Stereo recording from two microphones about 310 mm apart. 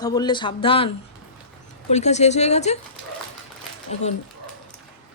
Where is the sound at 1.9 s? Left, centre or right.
Left.